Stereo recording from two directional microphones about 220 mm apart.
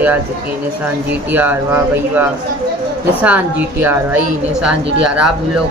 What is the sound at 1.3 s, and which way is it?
Speech, 10° right (ahead or behind).